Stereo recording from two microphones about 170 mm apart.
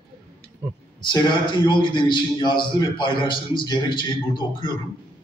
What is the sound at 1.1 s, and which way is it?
A man's voice, 25° left (ahead or behind).